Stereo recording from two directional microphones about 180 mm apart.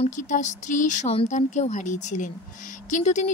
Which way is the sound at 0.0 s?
45° left (ahead or behind).